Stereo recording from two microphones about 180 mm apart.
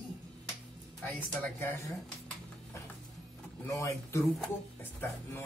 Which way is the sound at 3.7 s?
15° left (ahead or behind).